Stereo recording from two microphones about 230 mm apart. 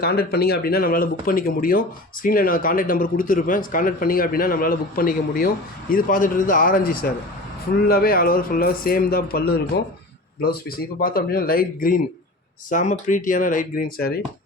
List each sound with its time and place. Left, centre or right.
0.0 s a man's voice: left